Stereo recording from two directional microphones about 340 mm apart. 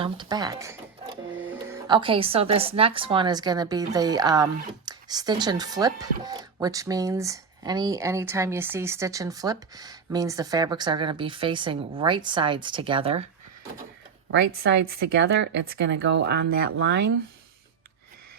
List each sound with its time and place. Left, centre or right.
0.0 s speech: centre
14.3 s speech: right